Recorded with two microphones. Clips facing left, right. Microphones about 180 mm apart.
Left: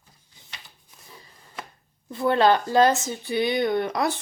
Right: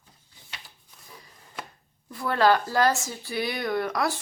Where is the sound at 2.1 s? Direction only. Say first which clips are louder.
Left 3 dB; 25° left (ahead or behind).